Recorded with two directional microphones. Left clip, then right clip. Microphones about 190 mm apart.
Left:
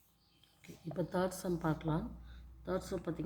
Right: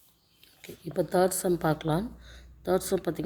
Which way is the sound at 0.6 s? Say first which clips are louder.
Right 10 dB; 40° right (ahead or behind).